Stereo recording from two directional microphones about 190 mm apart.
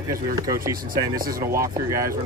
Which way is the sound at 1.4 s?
15° right (ahead or behind).